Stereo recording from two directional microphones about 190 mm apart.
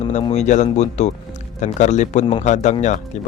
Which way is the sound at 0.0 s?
35° left (ahead or behind).